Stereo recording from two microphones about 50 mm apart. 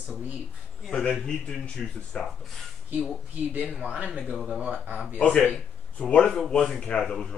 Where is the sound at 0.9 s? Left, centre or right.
Centre.